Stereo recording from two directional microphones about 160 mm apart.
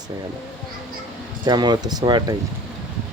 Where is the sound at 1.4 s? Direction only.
25° right (ahead or behind).